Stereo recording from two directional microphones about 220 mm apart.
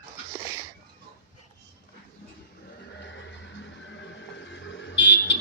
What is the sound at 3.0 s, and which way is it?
Vehicle, 55° left (ahead or behind).